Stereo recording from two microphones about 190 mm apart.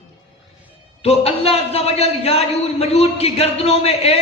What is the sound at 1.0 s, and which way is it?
A man's voice, 30° left (ahead or behind).